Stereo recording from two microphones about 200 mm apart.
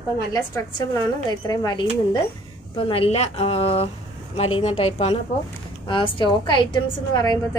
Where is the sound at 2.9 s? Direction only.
30° left (ahead or behind).